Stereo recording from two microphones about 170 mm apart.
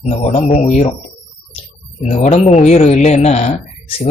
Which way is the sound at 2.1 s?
40° left (ahead or behind).